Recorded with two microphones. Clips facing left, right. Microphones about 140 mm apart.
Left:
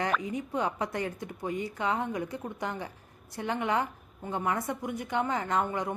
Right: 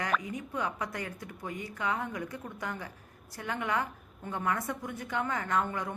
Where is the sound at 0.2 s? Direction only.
25° left (ahead or behind).